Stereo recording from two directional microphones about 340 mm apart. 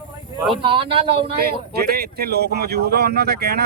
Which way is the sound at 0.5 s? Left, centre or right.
Centre.